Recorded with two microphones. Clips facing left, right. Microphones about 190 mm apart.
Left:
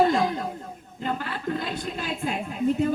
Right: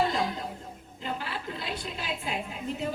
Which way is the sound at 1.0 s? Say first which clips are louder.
Left 6 dB; 50° left (ahead or behind).